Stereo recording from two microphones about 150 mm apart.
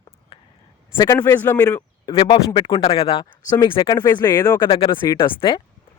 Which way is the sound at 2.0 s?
35° left (ahead or behind).